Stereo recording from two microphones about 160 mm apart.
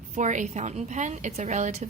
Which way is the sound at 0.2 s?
50° right (ahead or behind).